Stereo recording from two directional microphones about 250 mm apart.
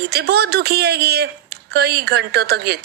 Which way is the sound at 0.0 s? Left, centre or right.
Right.